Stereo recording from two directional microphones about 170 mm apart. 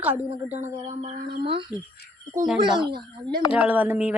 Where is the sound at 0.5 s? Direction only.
45° right (ahead or behind).